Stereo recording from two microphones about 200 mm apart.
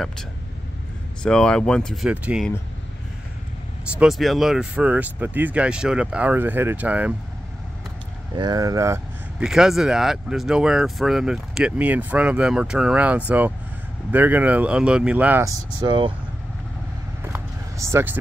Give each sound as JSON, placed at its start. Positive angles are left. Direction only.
{"t": 1.2, "sound": "speech", "side_deg": 5}
{"t": 3.9, "sound": "speech", "side_deg": 0}
{"t": 8.4, "sound": "speech", "side_deg": -20}
{"t": 9.4, "sound": "speech", "side_deg": -5}
{"t": 17.3, "sound": "vehicle", "side_deg": -15}